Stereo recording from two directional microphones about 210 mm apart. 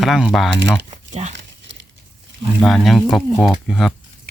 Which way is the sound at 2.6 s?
Centre (ahead or behind).